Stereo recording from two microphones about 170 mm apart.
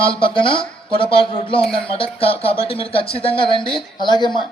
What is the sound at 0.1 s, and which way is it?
A man's voice, 30° left (ahead or behind).